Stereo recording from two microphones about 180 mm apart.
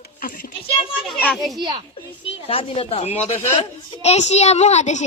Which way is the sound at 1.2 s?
5° left (ahead or behind).